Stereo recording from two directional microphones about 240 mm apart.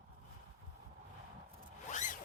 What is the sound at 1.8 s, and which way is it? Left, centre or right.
Zipper, left.